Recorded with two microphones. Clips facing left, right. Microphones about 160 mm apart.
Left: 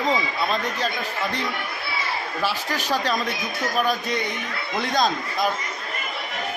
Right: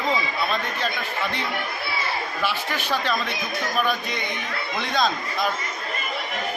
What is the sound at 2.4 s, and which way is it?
Speech, 40° left (ahead or behind).